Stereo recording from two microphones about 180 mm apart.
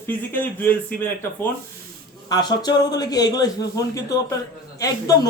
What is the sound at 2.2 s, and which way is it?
Speech, 20° left (ahead or behind).